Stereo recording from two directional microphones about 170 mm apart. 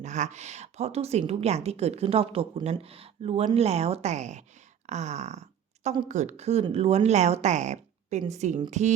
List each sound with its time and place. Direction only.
0.0 s a woman's voice: 45° right (ahead or behind)